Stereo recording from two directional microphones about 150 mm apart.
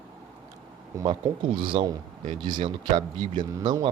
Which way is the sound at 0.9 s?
20° right (ahead or behind).